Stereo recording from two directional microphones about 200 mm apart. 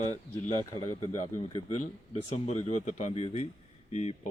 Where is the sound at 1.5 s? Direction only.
30° left (ahead or behind).